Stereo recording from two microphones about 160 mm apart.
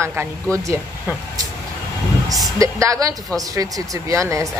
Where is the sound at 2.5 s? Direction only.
20° right (ahead or behind).